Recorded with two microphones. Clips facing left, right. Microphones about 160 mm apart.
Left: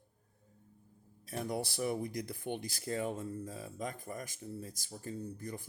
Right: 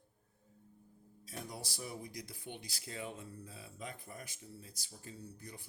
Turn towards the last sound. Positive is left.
turn(degrees=50)  # may be behind; listen again after turning